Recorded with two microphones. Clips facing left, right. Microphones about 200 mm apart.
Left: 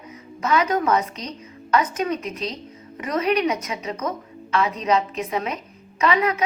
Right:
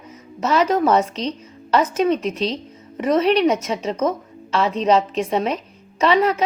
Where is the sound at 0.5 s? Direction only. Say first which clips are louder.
Right 4 dB; 30° right (ahead or behind).